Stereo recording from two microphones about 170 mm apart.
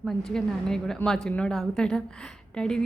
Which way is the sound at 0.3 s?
5° left (ahead or behind).